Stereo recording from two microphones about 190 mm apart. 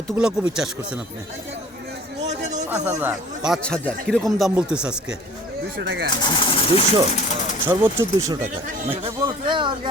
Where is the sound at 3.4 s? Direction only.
Centre (ahead or behind).